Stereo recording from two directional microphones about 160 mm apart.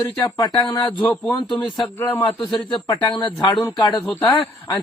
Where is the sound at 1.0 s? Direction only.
10° left (ahead or behind).